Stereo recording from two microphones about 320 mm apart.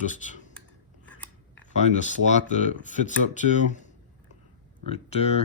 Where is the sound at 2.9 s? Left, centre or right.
Left.